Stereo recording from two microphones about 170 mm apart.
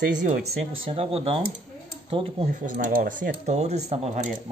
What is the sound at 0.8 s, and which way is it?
Speech, 35° right (ahead or behind).